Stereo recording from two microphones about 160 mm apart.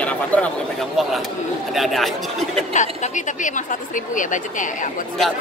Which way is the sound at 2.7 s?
50° left (ahead or behind).